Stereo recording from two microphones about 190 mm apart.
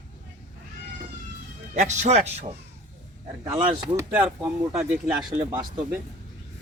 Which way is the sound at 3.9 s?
10° right (ahead or behind).